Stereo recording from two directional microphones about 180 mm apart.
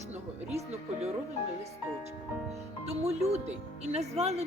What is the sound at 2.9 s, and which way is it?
Speech, 35° right (ahead or behind).